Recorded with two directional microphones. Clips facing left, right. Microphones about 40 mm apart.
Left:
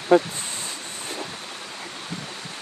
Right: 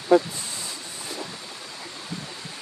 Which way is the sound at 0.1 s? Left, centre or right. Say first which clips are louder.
Left 1 dB; left.